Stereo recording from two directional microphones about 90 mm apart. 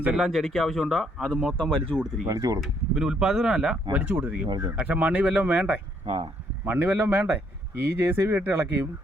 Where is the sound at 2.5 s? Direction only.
5° right (ahead or behind).